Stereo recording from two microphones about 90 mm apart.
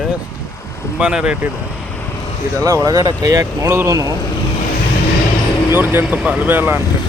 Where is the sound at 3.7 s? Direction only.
30° right (ahead or behind).